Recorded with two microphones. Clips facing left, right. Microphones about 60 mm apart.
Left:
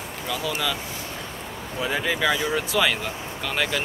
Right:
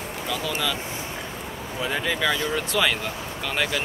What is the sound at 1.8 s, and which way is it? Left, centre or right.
Speech, centre.